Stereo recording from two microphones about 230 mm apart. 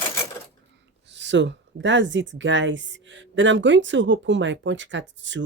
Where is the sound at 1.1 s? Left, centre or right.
Right.